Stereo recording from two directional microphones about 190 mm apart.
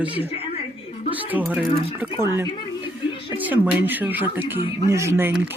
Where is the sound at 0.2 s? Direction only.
30° left (ahead or behind).